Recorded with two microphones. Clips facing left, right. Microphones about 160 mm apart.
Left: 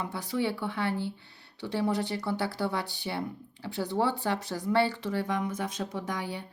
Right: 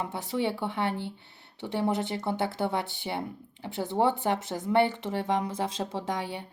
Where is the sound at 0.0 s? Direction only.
25° right (ahead or behind).